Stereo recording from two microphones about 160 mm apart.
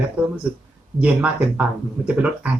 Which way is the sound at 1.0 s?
10° right (ahead or behind).